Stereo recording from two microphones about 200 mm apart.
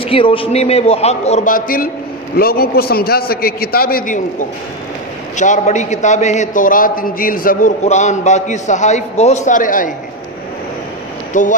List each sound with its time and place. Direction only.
0.0 s a man's voice: 25° left (ahead or behind); by 9.9 s 40° left (ahead or behind)
11.3 s a man's voice: 40° left (ahead or behind)